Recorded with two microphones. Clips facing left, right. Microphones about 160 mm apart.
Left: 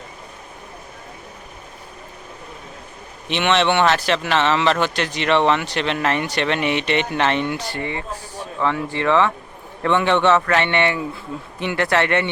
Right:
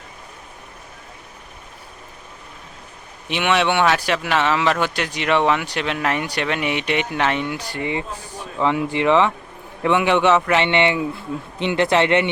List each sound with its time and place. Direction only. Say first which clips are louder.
3.2 s speech: left 1 dB; 10° right (ahead or behind)